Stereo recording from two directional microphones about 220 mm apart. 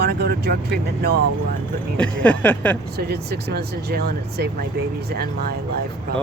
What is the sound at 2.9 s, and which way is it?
Speech, 45° right (ahead or behind).